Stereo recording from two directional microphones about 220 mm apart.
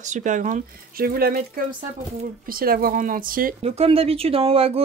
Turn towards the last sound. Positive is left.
turn(degrees=-25)  # may be behind; listen again after turning